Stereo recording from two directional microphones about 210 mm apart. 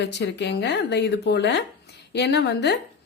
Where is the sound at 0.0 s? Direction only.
55° left (ahead or behind).